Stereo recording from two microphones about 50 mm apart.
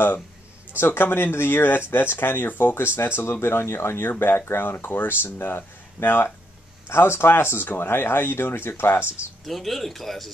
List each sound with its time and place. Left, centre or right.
0.7 s speech: left
3.2 s speech: left
9.4 s speech: centre